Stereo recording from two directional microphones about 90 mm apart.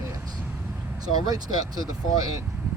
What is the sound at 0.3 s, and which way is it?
Vehicle, 15° right (ahead or behind).